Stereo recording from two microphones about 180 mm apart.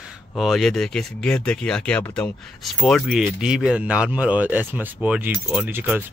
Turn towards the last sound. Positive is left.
turn(degrees=-10)  # may be behind; listen again after turning